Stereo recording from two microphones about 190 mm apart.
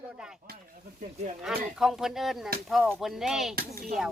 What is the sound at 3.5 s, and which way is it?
Speech, 50° right (ahead or behind).